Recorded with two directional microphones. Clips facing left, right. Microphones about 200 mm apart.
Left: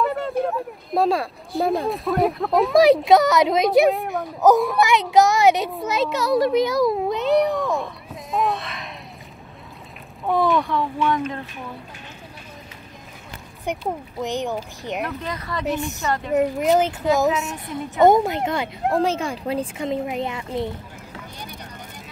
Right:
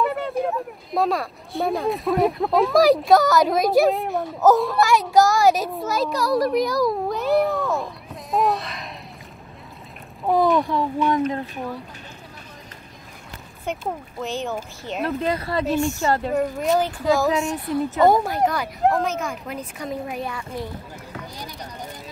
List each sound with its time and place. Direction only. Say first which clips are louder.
0.0 s a sound: left 1 dB; centre (ahead or behind)
1.0 s speech: left 2 dB; 30° left (ahead or behind)
1.5 s a child's voice: left 1 dB; centre (ahead or behind)
7.2 s a sound: left 1 dB; centre (ahead or behind)
10.2 s a child's voice: right 2 dB; centre (ahead or behind)
10.7 s speech: right 1 dB; 40° right (ahead or behind)
13.7 s speech: left 2 dB; 15° left (ahead or behind)
15.0 s speech: right 6 dB; 30° right (ahead or behind)
15.6 s speech: right 2 dB; 20° left (ahead or behind)